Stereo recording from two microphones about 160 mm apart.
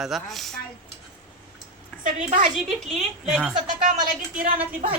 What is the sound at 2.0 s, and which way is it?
Speech, 55° right (ahead or behind).